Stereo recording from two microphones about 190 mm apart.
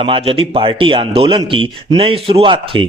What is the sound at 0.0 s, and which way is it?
Speech, 30° right (ahead or behind).